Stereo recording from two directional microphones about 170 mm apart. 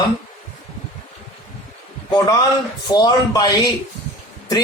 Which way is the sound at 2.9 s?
20° left (ahead or behind).